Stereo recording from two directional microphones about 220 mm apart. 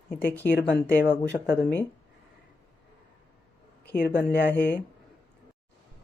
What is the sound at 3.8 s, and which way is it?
Speech, 45° left (ahead or behind).